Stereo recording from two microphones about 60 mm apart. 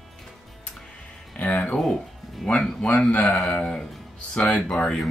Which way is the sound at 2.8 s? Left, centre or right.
Left.